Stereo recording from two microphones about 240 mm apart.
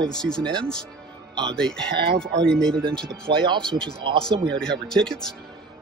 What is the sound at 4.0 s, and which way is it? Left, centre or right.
Speech, right.